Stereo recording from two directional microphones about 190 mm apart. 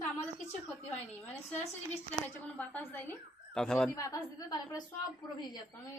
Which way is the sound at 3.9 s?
20° left (ahead or behind).